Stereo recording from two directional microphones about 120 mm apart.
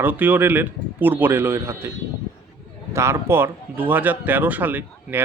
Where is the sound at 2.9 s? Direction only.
20° right (ahead or behind).